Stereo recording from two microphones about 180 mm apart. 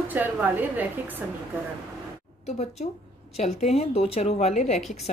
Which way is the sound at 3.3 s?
35° left (ahead or behind).